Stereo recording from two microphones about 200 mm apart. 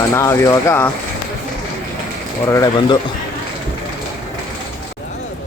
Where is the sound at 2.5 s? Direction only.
20° left (ahead or behind).